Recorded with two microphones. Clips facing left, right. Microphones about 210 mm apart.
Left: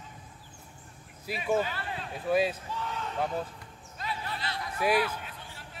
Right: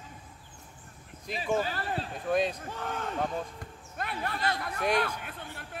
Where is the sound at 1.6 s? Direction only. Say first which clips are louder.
Right 1 dB; 40° right (ahead or behind).